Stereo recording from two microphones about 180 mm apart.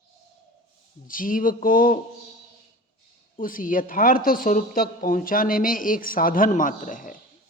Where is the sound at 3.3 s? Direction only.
50° left (ahead or behind).